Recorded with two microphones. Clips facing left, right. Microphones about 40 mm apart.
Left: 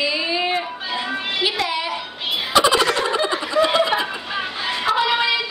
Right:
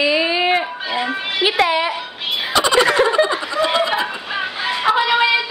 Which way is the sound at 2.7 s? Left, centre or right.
Centre.